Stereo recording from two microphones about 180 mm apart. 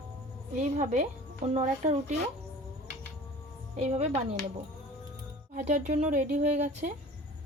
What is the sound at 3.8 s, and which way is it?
Speech, 35° right (ahead or behind).